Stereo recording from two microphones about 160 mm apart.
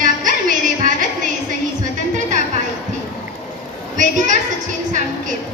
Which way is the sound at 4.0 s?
50° right (ahead or behind).